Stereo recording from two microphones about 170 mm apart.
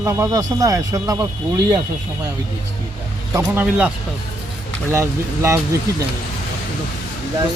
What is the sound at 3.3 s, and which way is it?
Speech, 10° right (ahead or behind).